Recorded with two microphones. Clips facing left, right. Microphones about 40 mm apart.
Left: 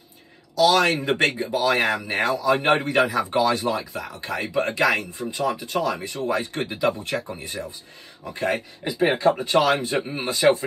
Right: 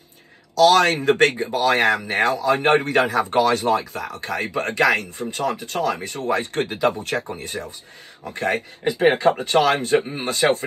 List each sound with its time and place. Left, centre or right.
0.6 s a man's voice: right